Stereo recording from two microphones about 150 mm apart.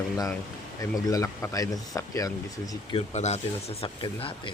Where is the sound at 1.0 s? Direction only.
25° left (ahead or behind).